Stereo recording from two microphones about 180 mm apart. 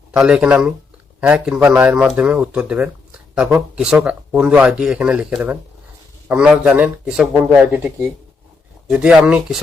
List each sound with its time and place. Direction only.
0.1 s speech: 5° right (ahead or behind)